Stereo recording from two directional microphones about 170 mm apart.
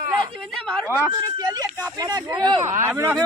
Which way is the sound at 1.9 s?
20° right (ahead or behind).